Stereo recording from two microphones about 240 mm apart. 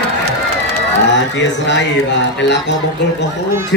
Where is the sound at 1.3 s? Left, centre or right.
Left.